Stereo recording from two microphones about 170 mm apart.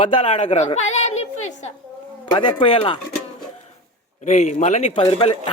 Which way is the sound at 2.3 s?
30° left (ahead or behind).